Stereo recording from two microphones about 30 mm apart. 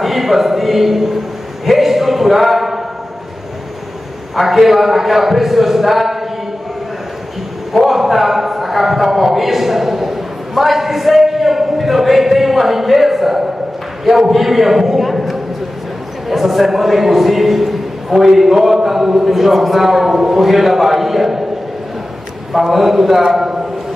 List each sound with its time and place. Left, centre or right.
0.0 s a man's voice: centre
1.7 s a sound: centre
4.4 s a man's voice: centre
7.7 s a man's voice: centre
22.5 s a man's voice: centre
23.2 s a sound: centre